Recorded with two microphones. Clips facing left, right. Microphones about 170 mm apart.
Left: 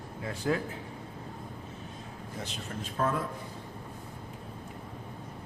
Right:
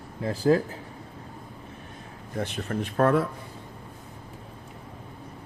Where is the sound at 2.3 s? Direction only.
60° right (ahead or behind).